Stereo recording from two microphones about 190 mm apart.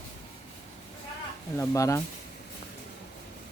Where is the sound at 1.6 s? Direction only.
15° left (ahead or behind).